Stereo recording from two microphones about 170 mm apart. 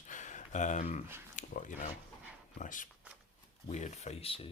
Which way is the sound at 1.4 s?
45° left (ahead or behind).